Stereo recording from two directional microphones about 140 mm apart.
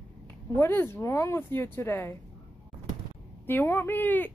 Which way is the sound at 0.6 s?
15° left (ahead or behind).